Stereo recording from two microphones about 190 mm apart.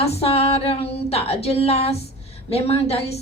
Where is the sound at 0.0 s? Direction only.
30° left (ahead or behind).